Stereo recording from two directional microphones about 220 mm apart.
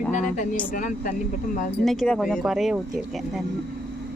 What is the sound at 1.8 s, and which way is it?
Speech, centre (ahead or behind).